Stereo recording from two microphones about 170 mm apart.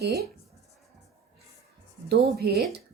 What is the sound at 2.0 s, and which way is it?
Speech, 70° right (ahead or behind).